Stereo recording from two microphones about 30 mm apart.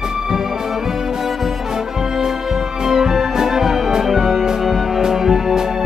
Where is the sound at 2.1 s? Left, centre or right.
Centre.